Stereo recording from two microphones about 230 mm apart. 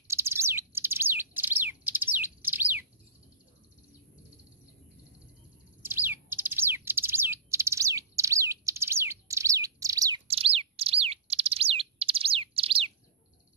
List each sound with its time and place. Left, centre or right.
0.1 s bird: centre
5.8 s bird: centre
10.2 s bird: right